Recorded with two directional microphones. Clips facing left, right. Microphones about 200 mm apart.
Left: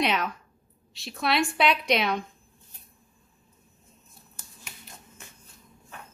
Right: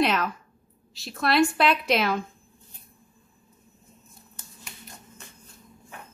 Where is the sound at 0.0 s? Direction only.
Centre (ahead or behind).